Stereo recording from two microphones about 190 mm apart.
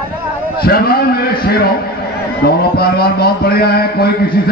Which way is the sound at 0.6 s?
55° left (ahead or behind).